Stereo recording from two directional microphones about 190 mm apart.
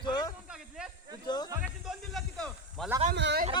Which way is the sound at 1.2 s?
20° left (ahead or behind).